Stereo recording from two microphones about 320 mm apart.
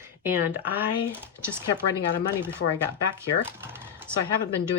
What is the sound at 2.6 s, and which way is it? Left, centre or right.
Speech, left.